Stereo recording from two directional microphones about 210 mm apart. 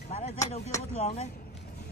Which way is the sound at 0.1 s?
30° left (ahead or behind).